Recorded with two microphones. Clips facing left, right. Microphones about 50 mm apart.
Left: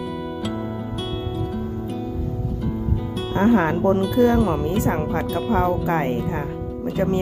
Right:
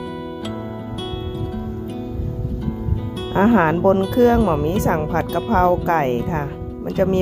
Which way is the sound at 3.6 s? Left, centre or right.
Right.